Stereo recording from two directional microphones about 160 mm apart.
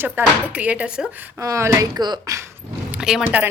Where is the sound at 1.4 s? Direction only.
20° right (ahead or behind).